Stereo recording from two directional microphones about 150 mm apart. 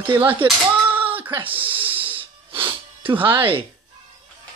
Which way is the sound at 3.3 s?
35° right (ahead or behind).